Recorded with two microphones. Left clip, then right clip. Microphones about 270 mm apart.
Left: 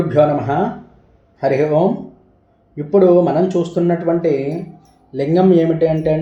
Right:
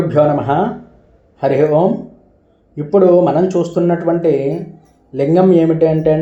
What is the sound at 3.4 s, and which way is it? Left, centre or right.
Speech, centre.